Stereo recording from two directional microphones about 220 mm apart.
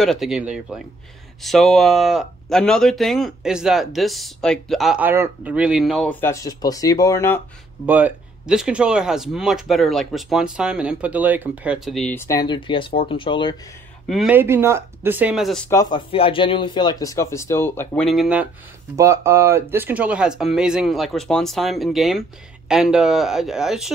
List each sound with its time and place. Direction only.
0.0 s speech: centre (ahead or behind)
7.8 s speech: 5° right (ahead or behind); by 13.6 s 20° left (ahead or behind)
14.0 s speech: centre (ahead or behind)
15.7 s speech: 20° left (ahead or behind); by 23.9 s centre (ahead or behind)